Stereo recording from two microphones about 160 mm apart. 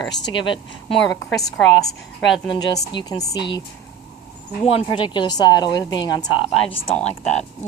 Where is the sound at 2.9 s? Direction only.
25° left (ahead or behind).